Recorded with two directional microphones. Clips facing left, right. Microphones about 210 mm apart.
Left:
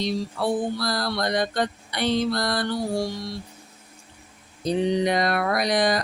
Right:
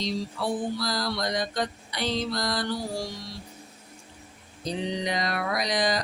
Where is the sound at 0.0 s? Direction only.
60° left (ahead or behind).